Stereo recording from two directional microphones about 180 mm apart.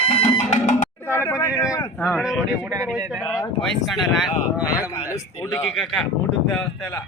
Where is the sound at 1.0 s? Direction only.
10° left (ahead or behind).